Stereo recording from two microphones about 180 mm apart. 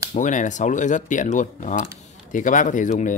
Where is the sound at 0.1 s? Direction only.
45° left (ahead or behind).